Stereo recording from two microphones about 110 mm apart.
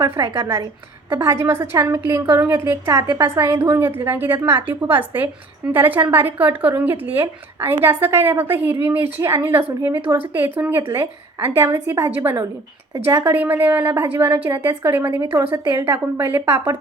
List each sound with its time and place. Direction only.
0.0 s a woman's voice: 25° right (ahead or behind)